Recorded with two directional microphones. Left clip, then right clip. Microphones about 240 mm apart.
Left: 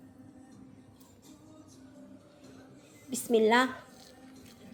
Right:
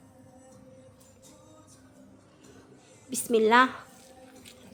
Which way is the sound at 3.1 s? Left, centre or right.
Centre.